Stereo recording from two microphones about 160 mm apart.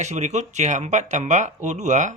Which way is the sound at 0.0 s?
45° right (ahead or behind).